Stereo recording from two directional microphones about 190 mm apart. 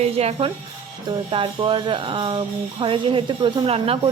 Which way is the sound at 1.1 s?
25° right (ahead or behind).